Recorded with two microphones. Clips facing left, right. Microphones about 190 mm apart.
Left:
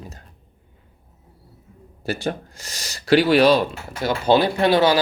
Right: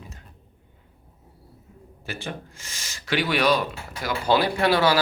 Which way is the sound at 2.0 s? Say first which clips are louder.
Left 9 dB; 40° left (ahead or behind).